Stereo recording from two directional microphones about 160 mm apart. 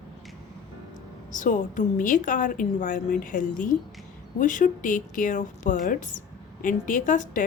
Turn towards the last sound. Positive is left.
turn(degrees=55)  # may be behind; listen again after turning